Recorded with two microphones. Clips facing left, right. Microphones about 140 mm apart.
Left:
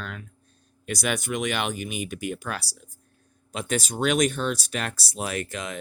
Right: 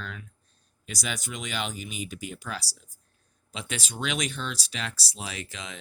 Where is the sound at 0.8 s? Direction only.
60° left (ahead or behind).